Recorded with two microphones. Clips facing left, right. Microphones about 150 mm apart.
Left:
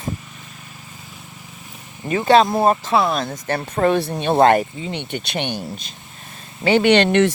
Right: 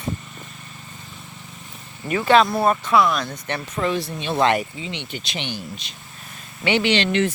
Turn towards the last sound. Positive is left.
turn(degrees=65)  # may be behind; listen again after turning